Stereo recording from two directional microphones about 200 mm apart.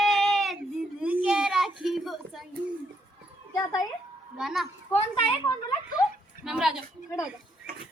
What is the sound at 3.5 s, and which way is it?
Speech, 20° left (ahead or behind).